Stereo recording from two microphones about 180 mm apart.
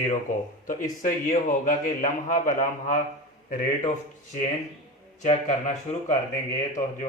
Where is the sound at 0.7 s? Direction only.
50° left (ahead or behind).